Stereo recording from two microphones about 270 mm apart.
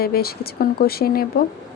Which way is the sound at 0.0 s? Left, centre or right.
Left.